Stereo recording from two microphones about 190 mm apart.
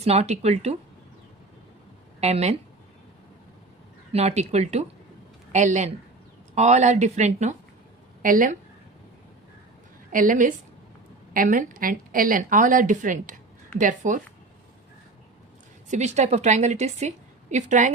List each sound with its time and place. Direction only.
0.0 s a woman's voice: 35° right (ahead or behind)
2.2 s a woman's voice: 35° right (ahead or behind)
4.1 s a woman's voice: 35° right (ahead or behind)
10.1 s a woman's voice: 45° right (ahead or behind)
15.9 s a woman's voice: 35° right (ahead or behind)